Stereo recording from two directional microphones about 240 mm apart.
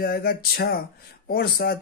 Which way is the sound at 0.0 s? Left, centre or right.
Left.